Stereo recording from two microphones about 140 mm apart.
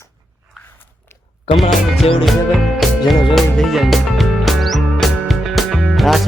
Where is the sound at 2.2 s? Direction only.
Centre (ahead or behind).